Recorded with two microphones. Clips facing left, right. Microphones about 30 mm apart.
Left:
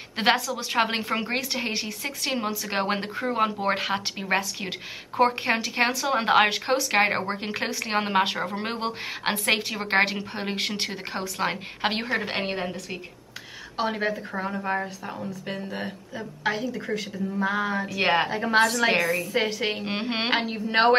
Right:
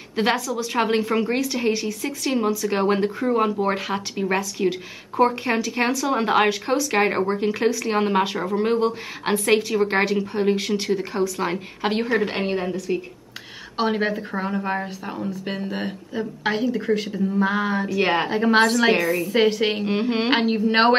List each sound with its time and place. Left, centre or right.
0.2 s a woman's voice: centre
12.1 s a woman's voice: centre
13.7 s speech: centre
17.9 s a woman's voice: centre
18.3 s speech: centre
18.9 s a woman's voice: centre
19.3 s speech: centre
19.8 s a woman's voice: centre
20.4 s speech: centre